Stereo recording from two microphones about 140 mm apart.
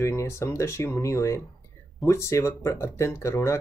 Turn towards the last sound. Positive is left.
turn(degrees=20)  # may be behind; listen again after turning